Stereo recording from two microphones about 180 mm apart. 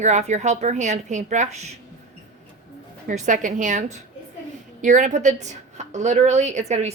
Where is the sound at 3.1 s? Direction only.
45° right (ahead or behind).